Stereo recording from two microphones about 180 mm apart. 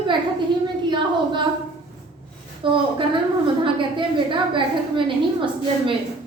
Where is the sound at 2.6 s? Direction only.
30° right (ahead or behind).